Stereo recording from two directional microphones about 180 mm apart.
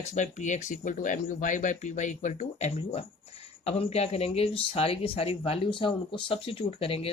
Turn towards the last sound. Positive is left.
turn(degrees=30)  # may be behind; listen again after turning